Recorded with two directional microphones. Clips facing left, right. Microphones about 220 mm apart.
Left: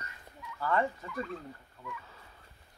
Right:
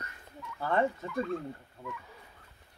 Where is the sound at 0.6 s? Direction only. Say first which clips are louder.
Right 2 dB; 25° right (ahead or behind).